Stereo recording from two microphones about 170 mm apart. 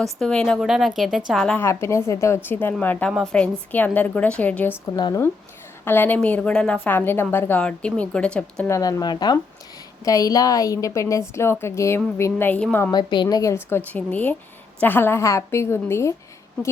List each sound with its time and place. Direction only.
0.0 s a woman's voice: 5° left (ahead or behind)
4.9 s a woman's voice: 25° left (ahead or behind)
5.8 s a woman's voice: 10° left (ahead or behind)
12.9 s a woman's voice: 25° left (ahead or behind)